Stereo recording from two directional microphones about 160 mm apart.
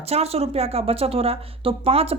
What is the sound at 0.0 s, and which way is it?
Speech, 40° right (ahead or behind).